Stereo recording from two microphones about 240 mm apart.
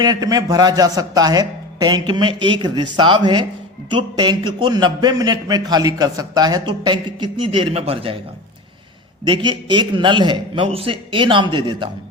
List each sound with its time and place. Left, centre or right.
0.0 s a man's voice: centre
9.2 s a man's voice: centre